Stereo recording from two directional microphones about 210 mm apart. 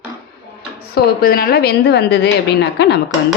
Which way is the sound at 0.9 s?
45° left (ahead or behind).